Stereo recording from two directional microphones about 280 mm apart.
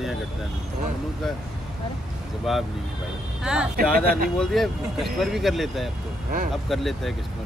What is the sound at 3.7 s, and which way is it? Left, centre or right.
Speech, right.